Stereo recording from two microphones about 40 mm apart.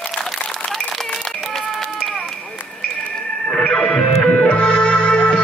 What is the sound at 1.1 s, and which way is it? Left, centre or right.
Run, centre.